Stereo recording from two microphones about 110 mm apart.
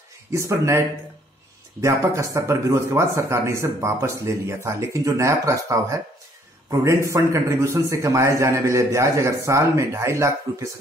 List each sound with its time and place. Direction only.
0.3 s speech: 25° right (ahead or behind)